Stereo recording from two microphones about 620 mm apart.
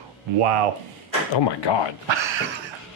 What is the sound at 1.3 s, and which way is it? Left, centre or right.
Speech, left.